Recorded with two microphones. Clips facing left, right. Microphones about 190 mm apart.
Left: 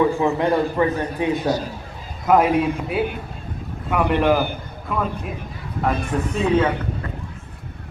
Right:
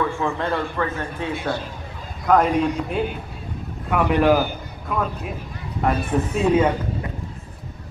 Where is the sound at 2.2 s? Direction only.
5° left (ahead or behind).